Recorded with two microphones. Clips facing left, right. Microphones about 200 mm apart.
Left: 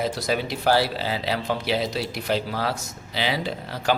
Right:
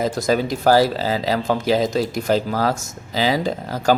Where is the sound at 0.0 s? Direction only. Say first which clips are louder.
Right 6 dB; 45° right (ahead or behind).